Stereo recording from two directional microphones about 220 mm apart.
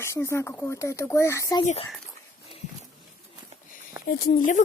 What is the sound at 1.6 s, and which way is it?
Speech, 30° left (ahead or behind).